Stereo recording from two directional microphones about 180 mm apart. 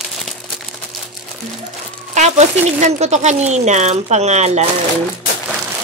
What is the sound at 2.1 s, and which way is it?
Speech, 40° right (ahead or behind).